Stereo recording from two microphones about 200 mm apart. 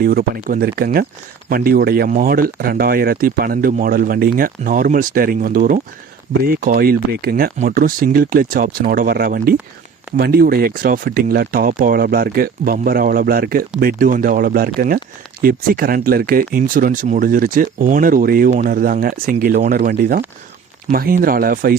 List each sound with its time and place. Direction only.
0.0 s speech: 45° right (ahead or behind)